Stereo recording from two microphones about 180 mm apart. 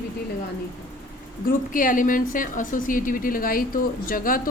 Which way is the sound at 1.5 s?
50° left (ahead or behind).